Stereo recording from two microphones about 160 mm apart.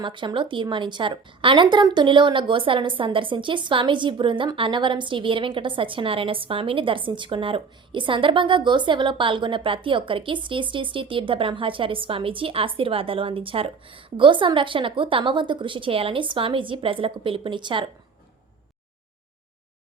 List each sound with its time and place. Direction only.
0.0 s a woman's voice: 30° right (ahead or behind)